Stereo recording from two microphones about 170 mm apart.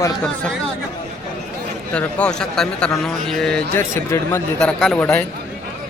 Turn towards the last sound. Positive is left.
turn(degrees=5)  # may be behind; listen again after turning